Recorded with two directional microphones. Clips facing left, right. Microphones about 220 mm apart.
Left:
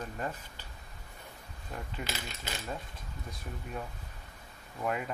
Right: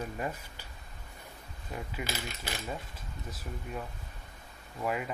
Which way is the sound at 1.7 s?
5° right (ahead or behind).